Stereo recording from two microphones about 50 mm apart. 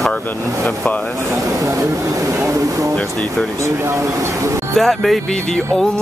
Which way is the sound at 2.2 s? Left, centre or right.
Right.